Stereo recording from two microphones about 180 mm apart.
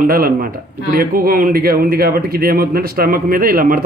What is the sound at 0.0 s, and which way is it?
A man's voice, 50° right (ahead or behind).